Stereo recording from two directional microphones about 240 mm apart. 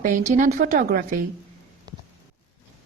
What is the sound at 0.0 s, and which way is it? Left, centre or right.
A woman's voice, right.